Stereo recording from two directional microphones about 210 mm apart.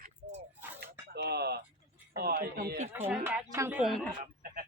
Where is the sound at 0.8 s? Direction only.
50° right (ahead or behind).